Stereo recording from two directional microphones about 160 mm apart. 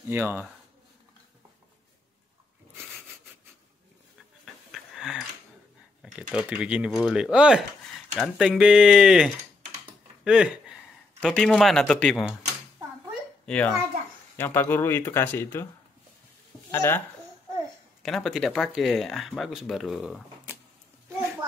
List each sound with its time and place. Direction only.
0.1 s speech: 15° right (ahead or behind)
4.7 s a sound: 5° right (ahead or behind)
6.0 s speech: 5° right (ahead or behind)
13.5 s speech: 10° left (ahead or behind)
16.7 s speech: 15° left (ahead or behind)
18.0 s speech: centre (ahead or behind)